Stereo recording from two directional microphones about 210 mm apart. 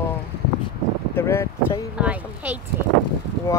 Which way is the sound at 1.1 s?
10° left (ahead or behind).